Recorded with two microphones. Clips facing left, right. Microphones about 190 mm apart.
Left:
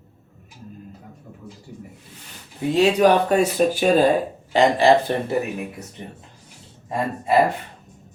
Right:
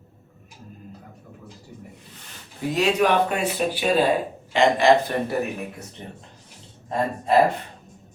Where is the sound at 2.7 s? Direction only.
30° left (ahead or behind).